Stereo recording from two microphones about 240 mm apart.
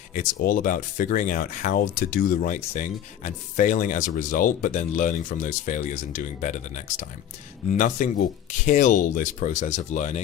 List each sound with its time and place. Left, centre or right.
0.1 s speech: left